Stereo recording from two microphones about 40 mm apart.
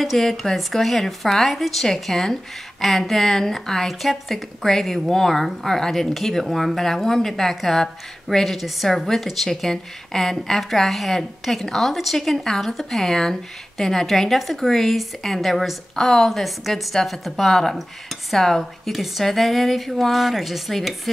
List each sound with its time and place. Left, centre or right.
0.0 s a woman's voice: centre
8.5 s a woman's voice: centre